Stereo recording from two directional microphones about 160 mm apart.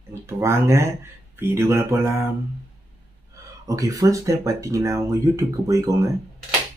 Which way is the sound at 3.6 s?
20° right (ahead or behind).